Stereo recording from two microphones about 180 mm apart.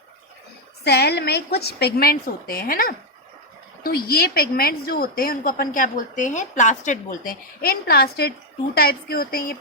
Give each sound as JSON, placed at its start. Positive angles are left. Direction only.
{"t": 0.9, "sound": "a woman's voice", "side_deg": 65}